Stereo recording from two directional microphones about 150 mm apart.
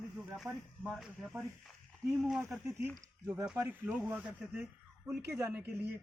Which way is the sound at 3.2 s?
20° right (ahead or behind).